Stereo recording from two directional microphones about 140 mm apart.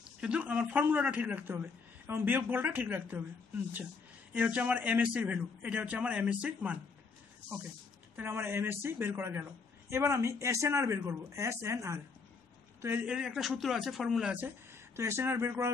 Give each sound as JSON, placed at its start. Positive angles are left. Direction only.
{"t": 0.2, "sound": "speech", "side_deg": -10}
{"t": 8.2, "sound": "a woman's voice", "side_deg": -15}